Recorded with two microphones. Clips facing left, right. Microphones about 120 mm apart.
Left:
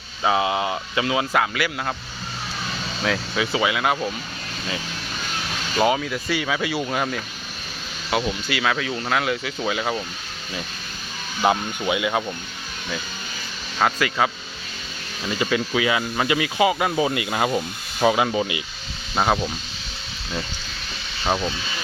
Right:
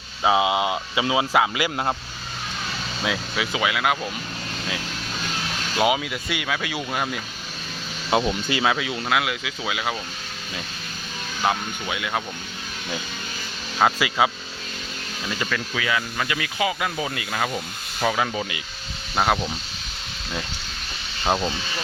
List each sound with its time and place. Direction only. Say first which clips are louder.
0.2 s speech: right 1 dB; 15° right (ahead or behind)
3.0 s speech: left 3 dB; 5° right (ahead or behind)
5.7 s speech: left 1 dB; 10° right (ahead or behind)
8.1 s speech: right 2 dB; 25° right (ahead or behind); by 9.9 s 5° right (ahead or behind)
11.4 s speech: left 4 dB; 5° left (ahead or behind)
13.7 s speech: right 1 dB; 10° right (ahead or behind)
15.4 s speech: left 7 dB; 20° left (ahead or behind)
19.1 s speech: left 1 dB; centre (ahead or behind)
21.2 s speech: even; 10° right (ahead or behind)